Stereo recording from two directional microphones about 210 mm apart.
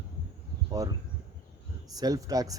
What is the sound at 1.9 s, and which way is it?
Speech, 15° right (ahead or behind).